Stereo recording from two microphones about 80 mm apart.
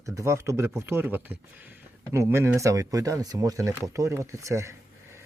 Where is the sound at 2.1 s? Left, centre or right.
Right.